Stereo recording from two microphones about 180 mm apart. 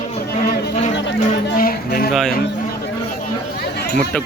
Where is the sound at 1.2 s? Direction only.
55° left (ahead or behind).